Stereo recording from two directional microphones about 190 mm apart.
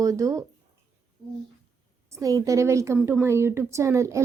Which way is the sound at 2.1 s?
15° right (ahead or behind).